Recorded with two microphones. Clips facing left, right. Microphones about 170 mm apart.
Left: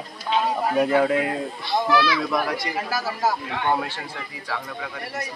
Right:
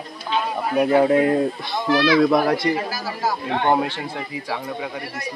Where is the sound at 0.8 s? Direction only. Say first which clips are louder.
Right 5 dB; 20° right (ahead or behind).